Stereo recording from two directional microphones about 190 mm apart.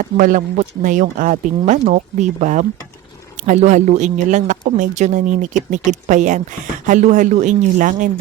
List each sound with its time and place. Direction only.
0.0 s speech: 45° right (ahead or behind)